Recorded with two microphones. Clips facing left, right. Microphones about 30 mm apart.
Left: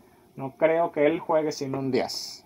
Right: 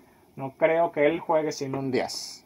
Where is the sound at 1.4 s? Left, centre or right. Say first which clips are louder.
Left 1 dB; centre.